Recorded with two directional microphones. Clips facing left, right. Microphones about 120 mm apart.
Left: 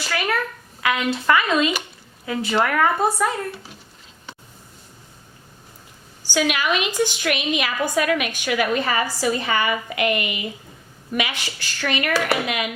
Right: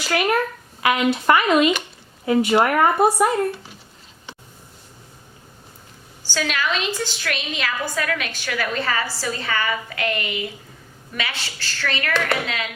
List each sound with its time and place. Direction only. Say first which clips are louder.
0.0 s speech: right 4 dB; 15° right (ahead or behind)
6.2 s a woman's voice: left 3 dB; 15° left (ahead or behind)